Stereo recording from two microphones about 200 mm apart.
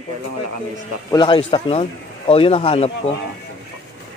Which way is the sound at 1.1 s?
25° left (ahead or behind).